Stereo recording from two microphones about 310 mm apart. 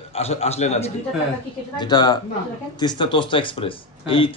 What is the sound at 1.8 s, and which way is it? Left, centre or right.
Speech, centre.